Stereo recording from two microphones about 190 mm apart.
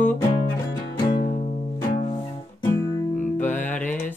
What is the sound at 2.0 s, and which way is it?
Music, 25° left (ahead or behind).